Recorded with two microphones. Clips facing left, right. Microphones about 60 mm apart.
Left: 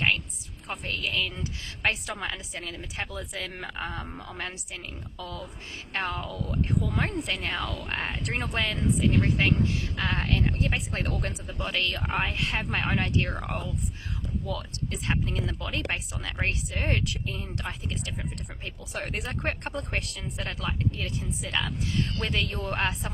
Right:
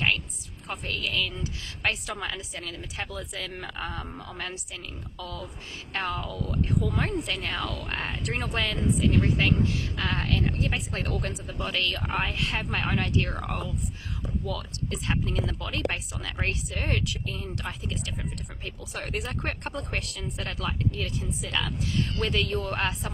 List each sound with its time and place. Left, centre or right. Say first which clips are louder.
0.9 s speech: even; left
7.3 s speech: even; left
12.0 s speech: even; centre